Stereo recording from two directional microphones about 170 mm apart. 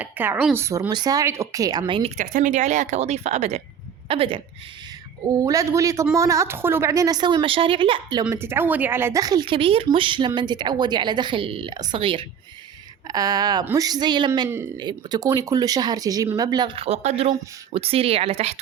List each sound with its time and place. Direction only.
0.0 s speech: 10° right (ahead or behind)
2.0 s speech: 45° right (ahead or behind)
5.4 s speech: 20° right (ahead or behind)
8.3 s speech: 15° right (ahead or behind); by 18.6 s 40° right (ahead or behind)